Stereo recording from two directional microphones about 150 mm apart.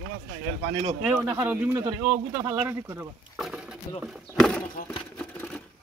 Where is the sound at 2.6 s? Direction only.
15° right (ahead or behind).